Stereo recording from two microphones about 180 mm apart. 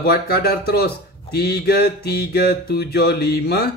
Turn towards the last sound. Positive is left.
turn(degrees=65)  # may be behind; listen again after turning